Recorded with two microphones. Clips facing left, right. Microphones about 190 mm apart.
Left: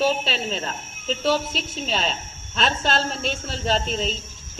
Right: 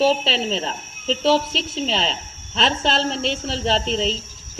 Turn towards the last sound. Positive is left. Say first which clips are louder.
# right 3 dB
turn(degrees=-25)  # may be behind; listen again after turning